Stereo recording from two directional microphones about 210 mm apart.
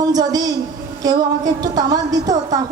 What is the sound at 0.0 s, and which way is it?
Speech, 20° right (ahead or behind).